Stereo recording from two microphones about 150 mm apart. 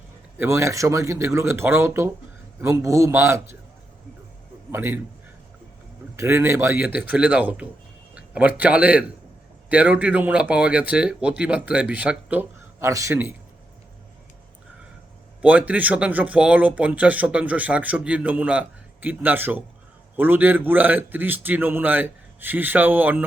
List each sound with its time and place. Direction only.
0.3 s a man's voice: 20° right (ahead or behind)
4.7 s a man's voice: 15° right (ahead or behind)
6.1 s speech: 15° right (ahead or behind)
15.4 s speech: 10° right (ahead or behind)